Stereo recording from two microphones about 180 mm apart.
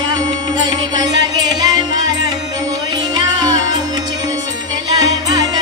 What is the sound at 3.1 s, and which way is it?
Music, 20° right (ahead or behind).